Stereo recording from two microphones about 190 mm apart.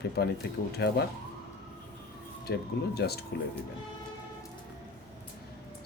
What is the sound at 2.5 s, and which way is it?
Speech, 65° left (ahead or behind).